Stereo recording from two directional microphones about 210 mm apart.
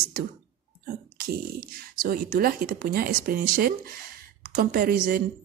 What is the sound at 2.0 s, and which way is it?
Speech, 45° right (ahead or behind).